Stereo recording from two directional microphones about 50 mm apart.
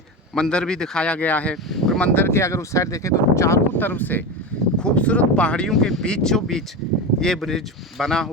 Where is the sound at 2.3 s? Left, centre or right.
Left.